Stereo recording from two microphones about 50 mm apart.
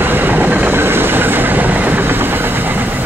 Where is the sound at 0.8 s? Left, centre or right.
Right.